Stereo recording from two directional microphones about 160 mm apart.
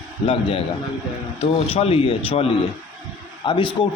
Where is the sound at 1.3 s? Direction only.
40° left (ahead or behind).